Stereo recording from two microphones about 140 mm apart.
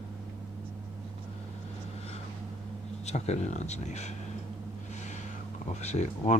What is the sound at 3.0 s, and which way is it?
Speech, 55° left (ahead or behind).